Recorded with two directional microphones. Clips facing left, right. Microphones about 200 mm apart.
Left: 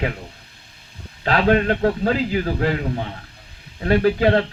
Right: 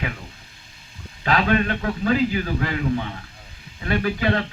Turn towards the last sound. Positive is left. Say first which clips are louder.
# left 6 dB
turn(degrees=40)  # may be behind; listen again after turning